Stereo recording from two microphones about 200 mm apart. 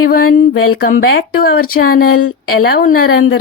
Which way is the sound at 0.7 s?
50° left (ahead or behind).